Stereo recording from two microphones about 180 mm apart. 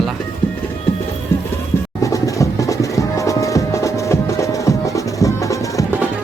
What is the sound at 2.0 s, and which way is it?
Music, 20° left (ahead or behind).